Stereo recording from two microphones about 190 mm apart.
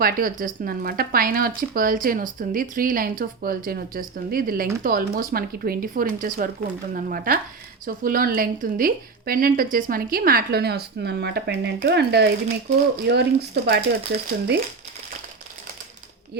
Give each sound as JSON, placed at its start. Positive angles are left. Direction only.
{"t": 0.0, "sound": "speech", "side_deg": -50}